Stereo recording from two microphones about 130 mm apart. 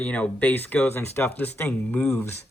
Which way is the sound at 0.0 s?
10° left (ahead or behind).